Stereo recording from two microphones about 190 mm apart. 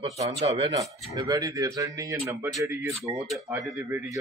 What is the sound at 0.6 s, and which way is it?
Speech, 15° right (ahead or behind).